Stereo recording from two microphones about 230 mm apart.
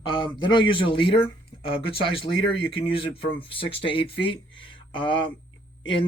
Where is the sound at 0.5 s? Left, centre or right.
Left.